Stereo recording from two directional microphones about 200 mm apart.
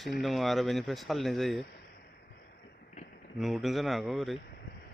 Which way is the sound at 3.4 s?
Centre (ahead or behind).